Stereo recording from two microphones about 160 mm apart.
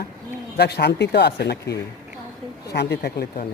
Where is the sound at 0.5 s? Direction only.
90° left.